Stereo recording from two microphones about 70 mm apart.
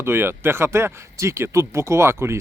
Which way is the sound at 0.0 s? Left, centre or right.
Right.